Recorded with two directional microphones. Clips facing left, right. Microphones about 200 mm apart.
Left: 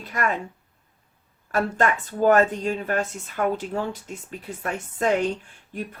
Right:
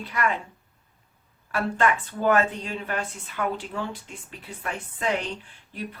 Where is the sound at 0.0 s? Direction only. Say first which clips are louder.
Left 1 dB; 45° left (ahead or behind).